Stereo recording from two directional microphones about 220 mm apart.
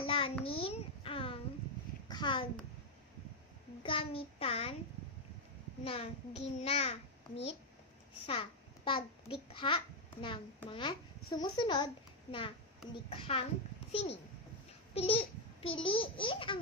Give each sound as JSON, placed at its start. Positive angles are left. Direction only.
{"t": 0.0, "sound": "a sound", "side_deg": 25}
{"t": 3.8, "sound": "a child's voice", "side_deg": 25}
{"t": 5.9, "sound": "a child's voice", "side_deg": 25}
{"t": 15.0, "sound": "a child's voice", "side_deg": 25}